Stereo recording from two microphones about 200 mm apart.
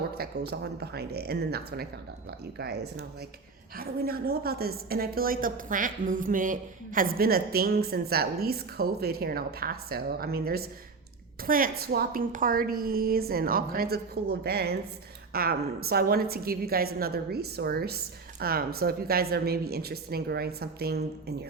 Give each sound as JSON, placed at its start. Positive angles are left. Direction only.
{"t": 0.2, "sound": "a woman's voice", "side_deg": -55}